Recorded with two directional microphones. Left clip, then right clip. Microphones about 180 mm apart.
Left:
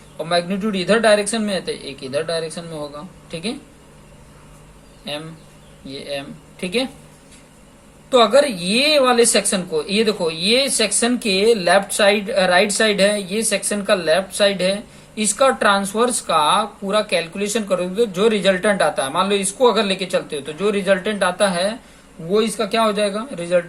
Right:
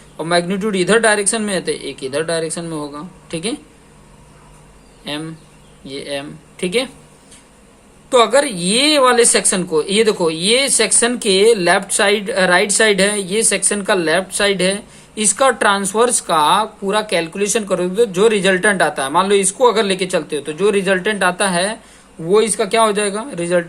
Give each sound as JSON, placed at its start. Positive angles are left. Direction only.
{"t": 0.2, "sound": "speech", "side_deg": -45}
{"t": 5.9, "sound": "speech", "side_deg": -45}
{"t": 8.1, "sound": "speech", "side_deg": -45}